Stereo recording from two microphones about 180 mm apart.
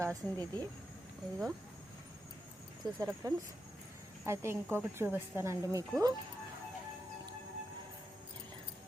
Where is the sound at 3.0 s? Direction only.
20° right (ahead or behind).